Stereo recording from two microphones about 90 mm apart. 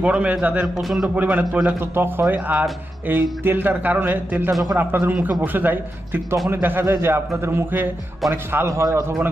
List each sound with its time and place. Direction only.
0.0 s a man's voice: 15° right (ahead or behind)
0.7 s a man's voice: centre (ahead or behind)
1.1 s a man's voice: 15° right (ahead or behind)
2.0 s a man's voice: 25° right (ahead or behind)